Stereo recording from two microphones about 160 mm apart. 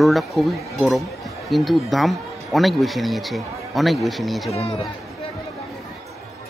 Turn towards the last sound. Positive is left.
turn(degrees=35)  # may be behind; listen again after turning